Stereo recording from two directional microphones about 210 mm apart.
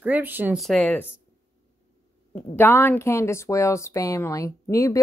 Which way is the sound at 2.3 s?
10° left (ahead or behind).